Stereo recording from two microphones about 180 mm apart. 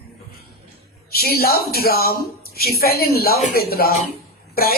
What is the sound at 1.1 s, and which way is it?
A woman's voice, 60° left (ahead or behind).